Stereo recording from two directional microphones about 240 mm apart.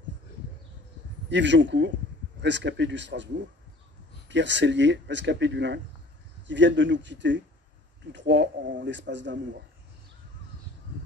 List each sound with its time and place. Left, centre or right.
1.3 s speech: right
4.3 s speech: right